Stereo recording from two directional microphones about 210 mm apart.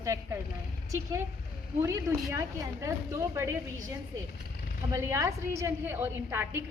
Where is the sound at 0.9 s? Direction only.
15° right (ahead or behind).